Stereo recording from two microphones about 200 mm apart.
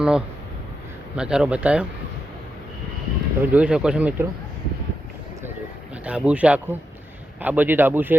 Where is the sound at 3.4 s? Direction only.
5° right (ahead or behind).